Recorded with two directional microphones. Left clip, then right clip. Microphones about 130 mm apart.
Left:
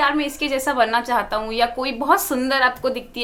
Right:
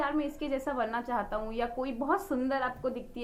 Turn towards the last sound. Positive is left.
turn(degrees=20)  # may be behind; listen again after turning